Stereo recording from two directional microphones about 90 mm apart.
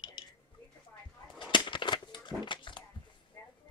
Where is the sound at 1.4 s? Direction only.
65° left (ahead or behind).